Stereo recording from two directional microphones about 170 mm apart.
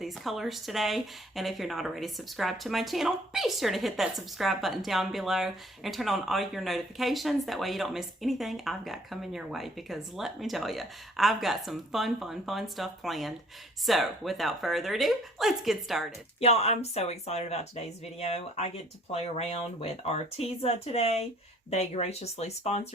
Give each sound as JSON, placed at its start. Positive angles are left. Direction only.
{"t": 0.0, "sound": "speech", "side_deg": 0}
{"t": 16.4, "sound": "speech", "side_deg": 40}